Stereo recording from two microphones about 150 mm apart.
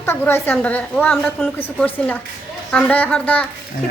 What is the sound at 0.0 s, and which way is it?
A woman's voice, 15° left (ahead or behind).